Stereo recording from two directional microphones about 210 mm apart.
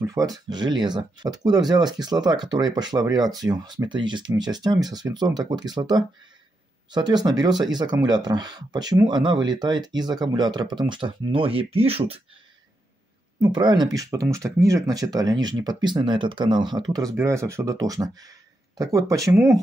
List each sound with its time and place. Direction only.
0.0 s speech: 15° right (ahead or behind)
13.4 s speech: 20° right (ahead or behind)